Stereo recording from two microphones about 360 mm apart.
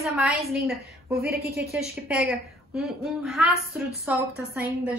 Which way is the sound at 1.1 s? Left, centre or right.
Right.